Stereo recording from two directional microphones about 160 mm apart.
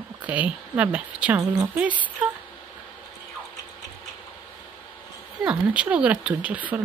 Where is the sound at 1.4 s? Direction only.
20° right (ahead or behind).